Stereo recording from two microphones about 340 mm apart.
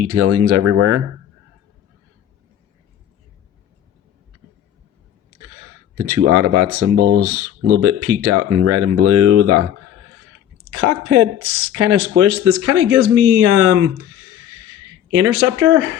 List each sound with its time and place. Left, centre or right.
0.0 s speech: right
6.0 s speech: right
10.7 s speech: right
15.1 s speech: right